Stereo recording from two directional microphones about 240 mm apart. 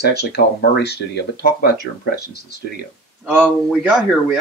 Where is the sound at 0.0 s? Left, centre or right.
Left.